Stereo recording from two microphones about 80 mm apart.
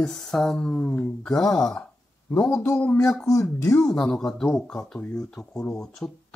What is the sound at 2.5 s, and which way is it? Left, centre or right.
Speech, left.